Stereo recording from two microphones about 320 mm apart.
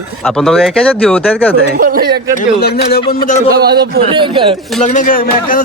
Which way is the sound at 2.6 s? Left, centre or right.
Left.